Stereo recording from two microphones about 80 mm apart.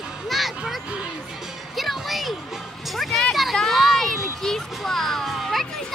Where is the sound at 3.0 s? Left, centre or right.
Centre.